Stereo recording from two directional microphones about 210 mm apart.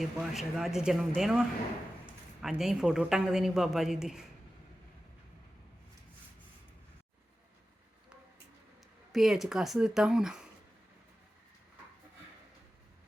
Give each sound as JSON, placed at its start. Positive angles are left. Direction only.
{"t": 0.0, "sound": "a woman's voice", "side_deg": 0}
{"t": 9.1, "sound": "a woman's voice", "side_deg": 0}